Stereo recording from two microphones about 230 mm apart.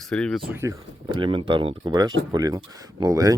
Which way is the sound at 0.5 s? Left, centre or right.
Centre.